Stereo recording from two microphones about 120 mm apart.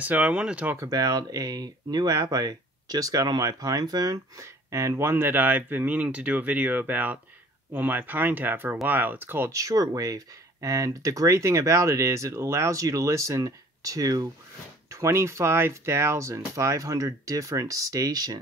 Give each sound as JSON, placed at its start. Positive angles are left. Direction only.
{"t": 0.0, "sound": "speech", "side_deg": -10}
{"t": 0.7, "sound": "speech", "side_deg": -30}